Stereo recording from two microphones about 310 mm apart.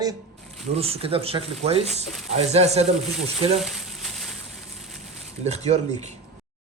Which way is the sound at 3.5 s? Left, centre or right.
Centre.